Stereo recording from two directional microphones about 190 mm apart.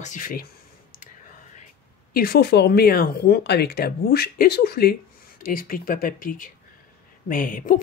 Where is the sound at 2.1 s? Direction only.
50° left (ahead or behind).